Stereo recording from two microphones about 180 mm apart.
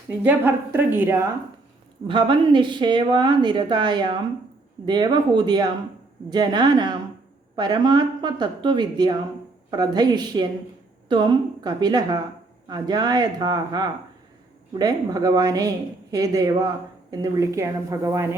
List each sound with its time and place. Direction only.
0.2 s a woman's voice: 10° right (ahead or behind)
2.0 s a woman's voice: 25° right (ahead or behind)